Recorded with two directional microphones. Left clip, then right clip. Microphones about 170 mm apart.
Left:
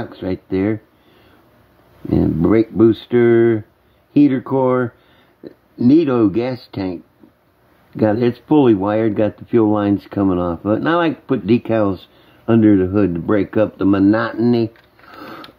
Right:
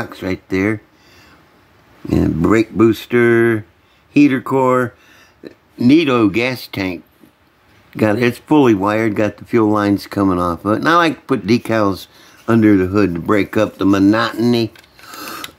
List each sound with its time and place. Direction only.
0.0 s speech: 20° right (ahead or behind)
2.0 s speech: 20° right (ahead or behind)